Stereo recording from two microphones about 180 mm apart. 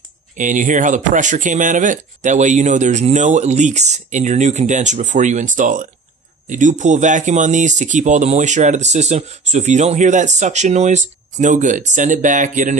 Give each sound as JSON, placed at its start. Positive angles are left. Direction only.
{"t": 0.4, "sound": "speech", "side_deg": -45}